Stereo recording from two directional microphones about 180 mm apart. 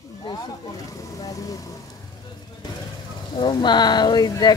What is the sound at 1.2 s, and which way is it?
Speech, 20° left (ahead or behind).